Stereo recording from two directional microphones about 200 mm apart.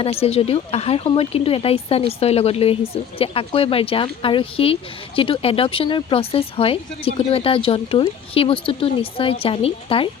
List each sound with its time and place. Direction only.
0.0 s speech: 30° left (ahead or behind)